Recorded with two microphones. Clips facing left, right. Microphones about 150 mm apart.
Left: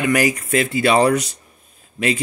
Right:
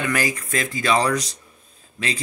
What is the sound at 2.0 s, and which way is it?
Speech, 25° left (ahead or behind).